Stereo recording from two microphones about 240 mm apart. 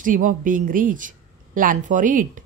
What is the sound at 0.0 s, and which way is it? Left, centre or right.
A woman's voice, right.